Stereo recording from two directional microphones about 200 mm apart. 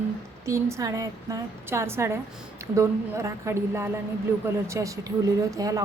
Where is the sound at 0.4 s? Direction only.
15° right (ahead or behind).